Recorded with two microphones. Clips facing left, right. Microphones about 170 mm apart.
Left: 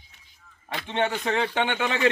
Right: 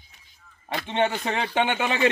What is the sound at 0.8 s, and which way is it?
A man's voice, 20° right (ahead or behind).